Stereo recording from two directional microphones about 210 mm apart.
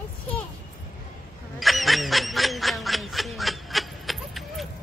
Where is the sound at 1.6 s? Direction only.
Centre (ahead or behind).